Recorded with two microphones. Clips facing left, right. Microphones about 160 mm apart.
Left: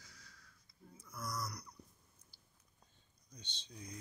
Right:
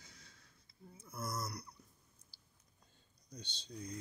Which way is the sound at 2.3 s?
30° right (ahead or behind).